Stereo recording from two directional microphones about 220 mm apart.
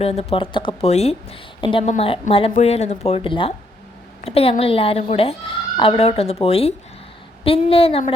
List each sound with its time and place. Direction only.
0.0 s a woman's voice: 30° left (ahead or behind)